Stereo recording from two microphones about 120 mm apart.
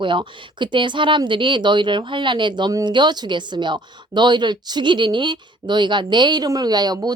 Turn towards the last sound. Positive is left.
turn(degrees=-35)  # may be behind; listen again after turning